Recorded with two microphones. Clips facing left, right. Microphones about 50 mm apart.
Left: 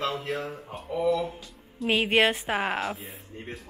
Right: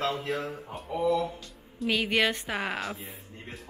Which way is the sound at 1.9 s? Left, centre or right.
Left.